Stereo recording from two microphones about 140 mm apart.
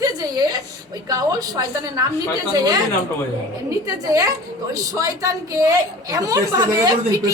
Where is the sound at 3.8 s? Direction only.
25° right (ahead or behind).